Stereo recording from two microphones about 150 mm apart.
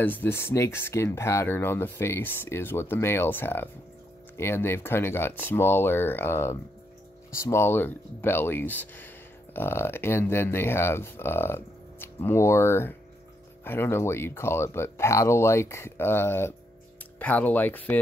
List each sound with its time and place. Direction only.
0.0 s speech: 10° left (ahead or behind)